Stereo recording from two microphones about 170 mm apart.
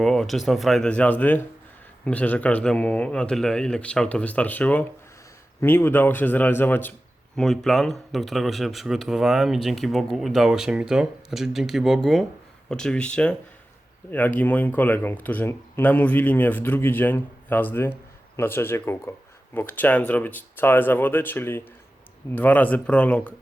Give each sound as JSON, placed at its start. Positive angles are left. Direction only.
{"t": 0.0, "sound": "speech", "side_deg": 0}